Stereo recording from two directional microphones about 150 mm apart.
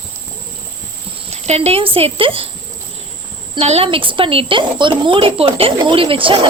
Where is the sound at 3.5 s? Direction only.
45° right (ahead or behind).